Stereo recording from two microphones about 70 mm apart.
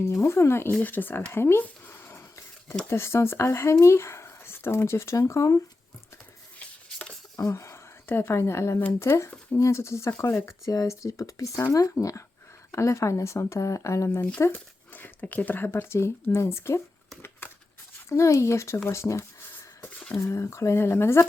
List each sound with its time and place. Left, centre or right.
0.0 s speech: left
0.8 s speech: left
6.6 s a sound: centre
7.3 s speech: left
10.7 s speech: left
14.5 s speech: left
18.1 s speech: left